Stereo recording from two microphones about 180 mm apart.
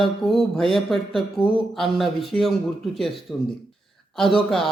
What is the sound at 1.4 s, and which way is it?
Speech, 25° left (ahead or behind).